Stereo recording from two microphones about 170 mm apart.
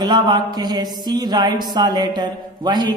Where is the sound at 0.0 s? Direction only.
25° right (ahead or behind).